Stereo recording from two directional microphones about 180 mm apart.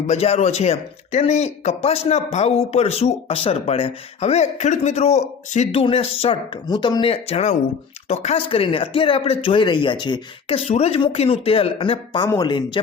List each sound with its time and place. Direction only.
0.1 s speech: 35° left (ahead or behind)